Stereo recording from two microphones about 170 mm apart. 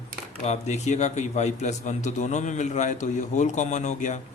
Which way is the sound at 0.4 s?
40° left (ahead or behind).